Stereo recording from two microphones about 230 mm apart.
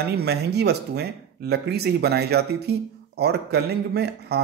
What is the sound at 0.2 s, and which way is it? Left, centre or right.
Speech, right.